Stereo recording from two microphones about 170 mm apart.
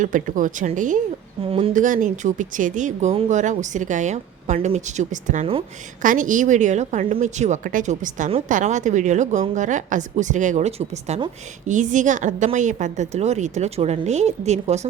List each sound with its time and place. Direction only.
0.0 s a woman's voice: 50° right (ahead or behind)
1.5 s speech: 35° right (ahead or behind)
1.7 s a woman's voice: 50° right (ahead or behind)